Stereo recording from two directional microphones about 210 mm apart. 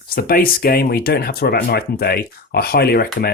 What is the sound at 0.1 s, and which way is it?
Speech, 45° left (ahead or behind).